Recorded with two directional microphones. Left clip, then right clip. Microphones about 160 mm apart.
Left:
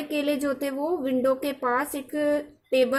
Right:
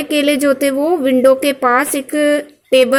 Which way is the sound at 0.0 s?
25° right (ahead or behind).